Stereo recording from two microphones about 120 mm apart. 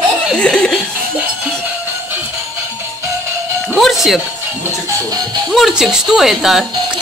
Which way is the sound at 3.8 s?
Centre (ahead or behind).